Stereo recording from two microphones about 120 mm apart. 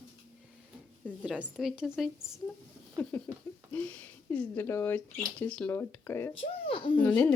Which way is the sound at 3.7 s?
15° left (ahead or behind).